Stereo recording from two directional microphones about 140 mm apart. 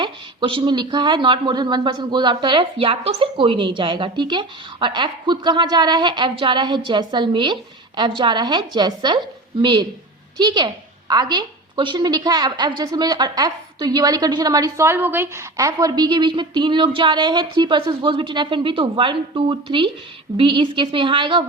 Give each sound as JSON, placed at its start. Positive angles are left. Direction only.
{"t": 0.0, "sound": "speech", "side_deg": -35}